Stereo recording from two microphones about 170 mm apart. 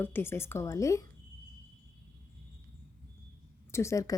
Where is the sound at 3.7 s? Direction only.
15° left (ahead or behind).